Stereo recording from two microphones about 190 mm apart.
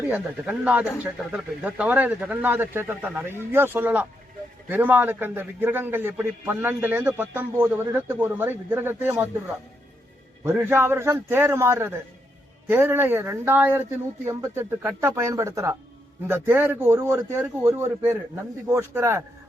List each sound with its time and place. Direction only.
0.1 s a man's voice: 10° right (ahead or behind)
10.4 s a man's voice: 10° right (ahead or behind)